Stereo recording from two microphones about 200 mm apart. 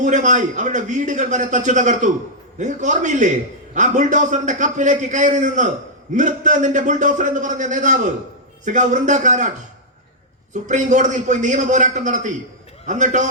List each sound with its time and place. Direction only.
0.0 s a man's voice: 40° right (ahead or behind)
10.5 s a man's voice: 35° right (ahead or behind)